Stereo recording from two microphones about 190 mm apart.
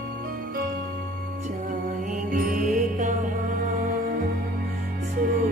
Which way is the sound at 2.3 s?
45° right (ahead or behind).